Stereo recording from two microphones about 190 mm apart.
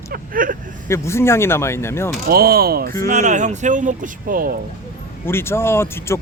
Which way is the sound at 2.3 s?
50° right (ahead or behind).